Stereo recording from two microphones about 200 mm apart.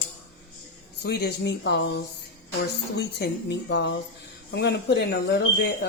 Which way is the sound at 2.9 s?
55° left (ahead or behind).